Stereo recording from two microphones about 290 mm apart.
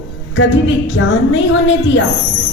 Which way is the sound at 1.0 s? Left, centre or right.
Left.